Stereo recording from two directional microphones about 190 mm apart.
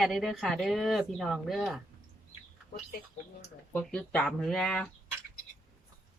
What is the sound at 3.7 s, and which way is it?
Speech, 5° left (ahead or behind).